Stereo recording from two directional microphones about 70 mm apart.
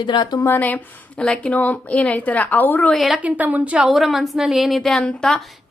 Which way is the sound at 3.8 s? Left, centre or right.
Centre.